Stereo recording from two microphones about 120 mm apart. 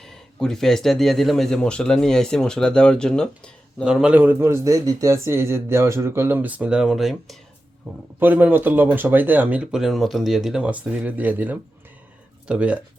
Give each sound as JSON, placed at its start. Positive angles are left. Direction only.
{"t": 0.0, "sound": "speech", "side_deg": 5}
{"t": 3.8, "sound": "a man's voice", "side_deg": -5}
{"t": 8.2, "sound": "speech", "side_deg": -15}